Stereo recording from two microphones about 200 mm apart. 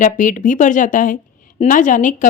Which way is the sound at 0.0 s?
40° left (ahead or behind).